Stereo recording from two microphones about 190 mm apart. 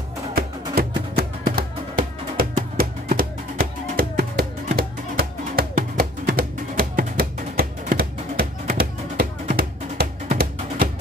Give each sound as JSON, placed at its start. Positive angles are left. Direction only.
{"t": 0.3, "sound": "music", "side_deg": -55}